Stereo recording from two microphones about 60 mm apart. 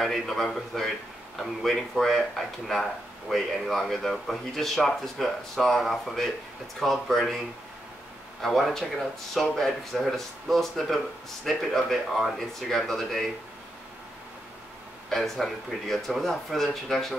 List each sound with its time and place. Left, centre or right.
0.0 s speech: centre
15.0 s speech: centre